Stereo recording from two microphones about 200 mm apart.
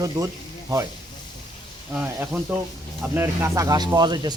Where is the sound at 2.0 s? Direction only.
5° right (ahead or behind); by 4.4 s 20° right (ahead or behind).